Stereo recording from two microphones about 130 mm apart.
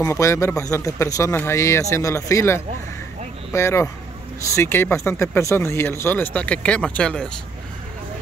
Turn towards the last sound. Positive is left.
turn(degrees=5)  # may be behind; listen again after turning